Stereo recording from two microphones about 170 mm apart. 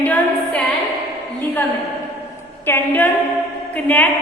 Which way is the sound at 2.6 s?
10° left (ahead or behind).